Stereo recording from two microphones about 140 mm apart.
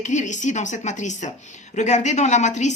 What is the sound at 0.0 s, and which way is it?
A woman's voice, 60° left (ahead or behind).